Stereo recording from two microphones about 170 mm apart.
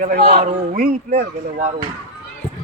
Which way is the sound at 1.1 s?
40° right (ahead or behind).